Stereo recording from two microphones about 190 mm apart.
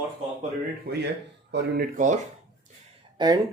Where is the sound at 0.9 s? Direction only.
55° right (ahead or behind).